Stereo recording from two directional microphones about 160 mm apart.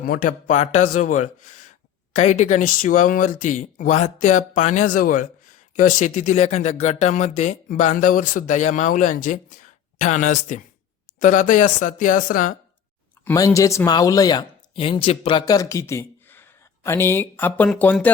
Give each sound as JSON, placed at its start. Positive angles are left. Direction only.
{"t": 0.0, "sound": "speech", "side_deg": 60}
{"t": 13.2, "sound": "speech", "side_deg": 20}